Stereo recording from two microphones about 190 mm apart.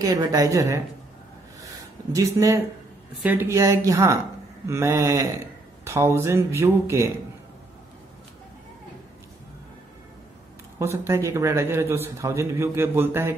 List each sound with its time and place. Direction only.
0.0 s a woman's voice: 20° right (ahead or behind)
2.1 s a man's voice: 20° right (ahead or behind)
10.8 s a man's voice: 15° right (ahead or behind)